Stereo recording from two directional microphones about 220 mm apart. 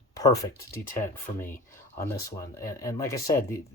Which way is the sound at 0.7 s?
40° left (ahead or behind).